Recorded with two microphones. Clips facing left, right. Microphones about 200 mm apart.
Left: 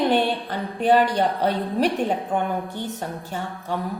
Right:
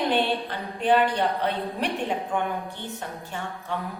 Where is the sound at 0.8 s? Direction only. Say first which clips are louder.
Left 3 dB; 40° left (ahead or behind).